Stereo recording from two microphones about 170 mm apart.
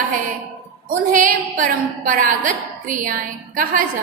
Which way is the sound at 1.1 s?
50° right (ahead or behind).